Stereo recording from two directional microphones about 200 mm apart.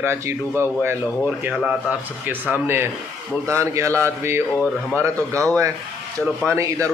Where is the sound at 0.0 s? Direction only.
15° right (ahead or behind).